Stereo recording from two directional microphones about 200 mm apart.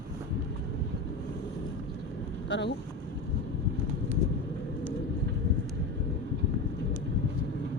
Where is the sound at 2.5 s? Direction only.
60° left (ahead or behind).